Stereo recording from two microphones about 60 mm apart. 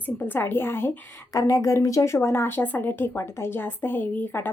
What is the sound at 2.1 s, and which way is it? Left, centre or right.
A woman's voice, left.